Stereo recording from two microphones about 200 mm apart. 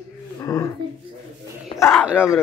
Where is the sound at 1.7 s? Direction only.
25° left (ahead or behind).